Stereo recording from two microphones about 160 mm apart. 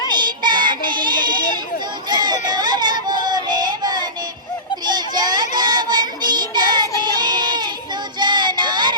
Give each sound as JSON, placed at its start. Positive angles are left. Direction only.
{"t": 0.2, "sound": "child singing", "side_deg": -30}
{"t": 2.0, "sound": "run", "side_deg": -25}
{"t": 3.2, "sound": "music", "side_deg": -25}
{"t": 4.9, "sound": "child singing", "side_deg": -25}